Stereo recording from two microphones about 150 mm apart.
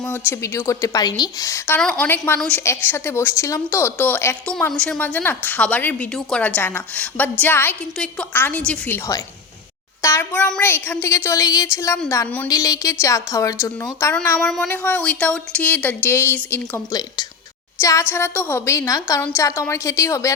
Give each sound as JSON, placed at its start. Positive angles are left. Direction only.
{"t": 0.3, "sound": "a woman's voice", "side_deg": 20}
{"t": 10.0, "sound": "a woman's voice", "side_deg": 20}
{"t": 14.1, "sound": "a woman's voice", "side_deg": 10}
{"t": 16.9, "sound": "a woman's voice", "side_deg": 25}